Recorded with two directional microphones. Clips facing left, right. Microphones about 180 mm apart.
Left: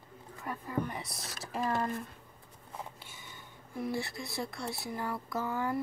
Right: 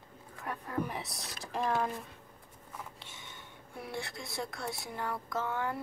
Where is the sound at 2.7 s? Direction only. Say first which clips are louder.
Left 3 dB; 30° left (ahead or behind).